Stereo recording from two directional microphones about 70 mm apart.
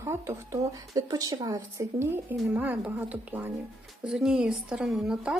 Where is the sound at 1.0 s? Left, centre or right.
Right.